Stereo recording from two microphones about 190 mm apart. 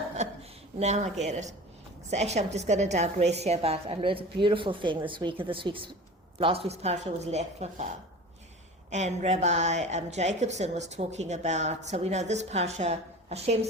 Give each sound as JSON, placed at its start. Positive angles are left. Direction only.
{"t": 0.2, "sound": "a sound", "side_deg": -35}
{"t": 0.8, "sound": "a woman's voice", "side_deg": -35}
{"t": 8.9, "sound": "a woman's voice", "side_deg": -35}